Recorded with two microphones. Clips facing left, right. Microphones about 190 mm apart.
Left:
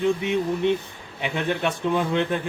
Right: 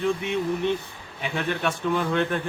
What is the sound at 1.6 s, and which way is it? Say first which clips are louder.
Speech: even; 20° left (ahead or behind).